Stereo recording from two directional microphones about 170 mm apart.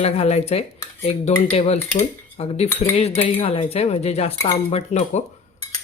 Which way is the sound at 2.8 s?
35° left (ahead or behind).